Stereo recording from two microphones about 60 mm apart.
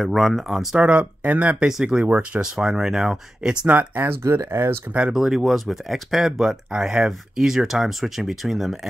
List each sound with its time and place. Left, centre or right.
0.0 s speech: centre
0.7 s speech: centre
1.7 s speech: centre
2.0 s speech: right
2.3 s speech: centre
3.6 s speech: right
5.1 s speech: centre